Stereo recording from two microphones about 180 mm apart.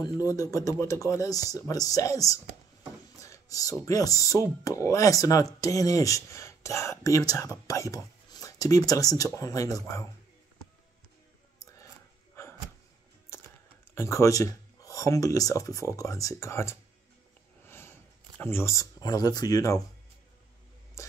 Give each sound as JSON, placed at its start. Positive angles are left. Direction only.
{"t": 0.0, "sound": "speech", "side_deg": 20}
{"t": 13.9, "sound": "speech", "side_deg": 15}
{"t": 17.6, "sound": "a sound", "side_deg": 15}
{"t": 18.4, "sound": "speech", "side_deg": 15}